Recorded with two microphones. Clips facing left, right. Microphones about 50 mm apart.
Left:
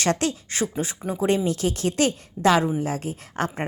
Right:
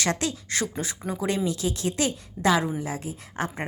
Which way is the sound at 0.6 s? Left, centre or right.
Left.